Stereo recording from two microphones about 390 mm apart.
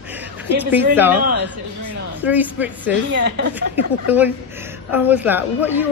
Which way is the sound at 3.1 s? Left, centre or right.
Right.